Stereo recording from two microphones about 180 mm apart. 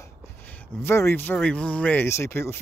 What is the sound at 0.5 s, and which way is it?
Speech, 15° left (ahead or behind).